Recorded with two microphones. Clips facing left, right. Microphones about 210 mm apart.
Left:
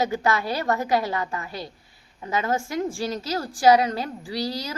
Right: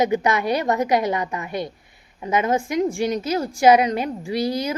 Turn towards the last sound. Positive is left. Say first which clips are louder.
# right 6 dB
turn(degrees=-20)  # may be behind; listen again after turning